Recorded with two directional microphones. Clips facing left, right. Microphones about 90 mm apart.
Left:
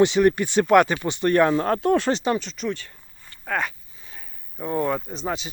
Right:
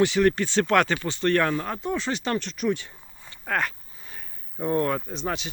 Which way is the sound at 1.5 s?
45° left (ahead or behind).